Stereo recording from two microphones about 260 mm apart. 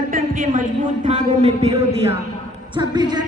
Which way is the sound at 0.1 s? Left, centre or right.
Right.